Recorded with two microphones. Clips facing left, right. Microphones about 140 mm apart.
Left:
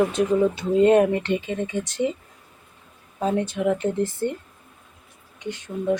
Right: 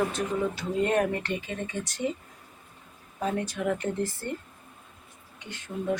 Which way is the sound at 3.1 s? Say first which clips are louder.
Left 6 dB; 30° left (ahead or behind).